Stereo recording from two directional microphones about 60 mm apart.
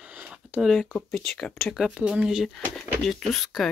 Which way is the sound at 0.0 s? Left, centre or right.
Right.